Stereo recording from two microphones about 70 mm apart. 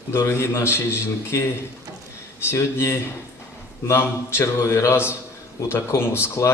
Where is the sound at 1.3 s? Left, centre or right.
Left.